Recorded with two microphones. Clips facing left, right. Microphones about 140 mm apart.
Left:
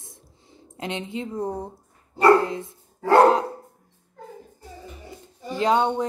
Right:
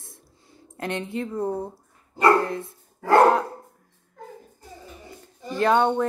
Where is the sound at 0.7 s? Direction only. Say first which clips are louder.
Right 1 dB; 20° left (ahead or behind).